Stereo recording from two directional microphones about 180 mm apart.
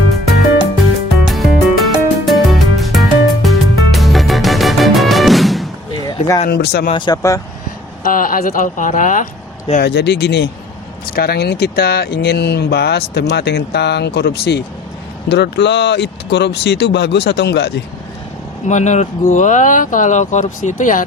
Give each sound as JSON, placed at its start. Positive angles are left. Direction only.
{"t": 1.3, "sound": "music", "side_deg": 0}
{"t": 6.0, "sound": "a sound", "side_deg": 20}
{"t": 6.5, "sound": "speech", "side_deg": 60}
{"t": 6.9, "sound": "speech", "side_deg": 25}
{"t": 8.0, "sound": "speech", "side_deg": 50}
{"t": 9.8, "sound": "speech", "side_deg": 70}
{"t": 11.0, "sound": "speech", "side_deg": 55}
{"t": 18.7, "sound": "speech", "side_deg": 40}